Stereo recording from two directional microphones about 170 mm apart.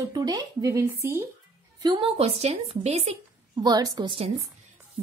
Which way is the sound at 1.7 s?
25° right (ahead or behind).